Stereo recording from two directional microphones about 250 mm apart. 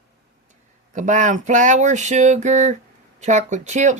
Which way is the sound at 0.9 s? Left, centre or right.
Right.